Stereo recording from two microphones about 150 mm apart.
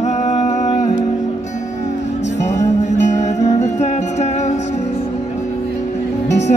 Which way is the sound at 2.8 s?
50° left (ahead or behind).